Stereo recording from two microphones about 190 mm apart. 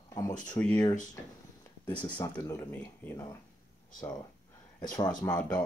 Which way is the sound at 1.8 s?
15° left (ahead or behind).